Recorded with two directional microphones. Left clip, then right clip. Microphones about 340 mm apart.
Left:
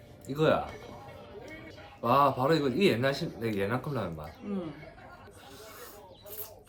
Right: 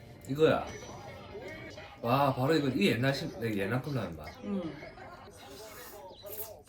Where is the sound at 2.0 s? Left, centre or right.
Centre.